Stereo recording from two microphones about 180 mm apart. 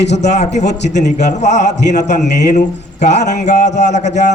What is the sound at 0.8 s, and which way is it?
A man's voice, 40° left (ahead or behind).